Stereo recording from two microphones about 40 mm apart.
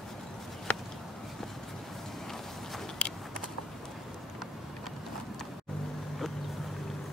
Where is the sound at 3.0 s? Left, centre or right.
Left.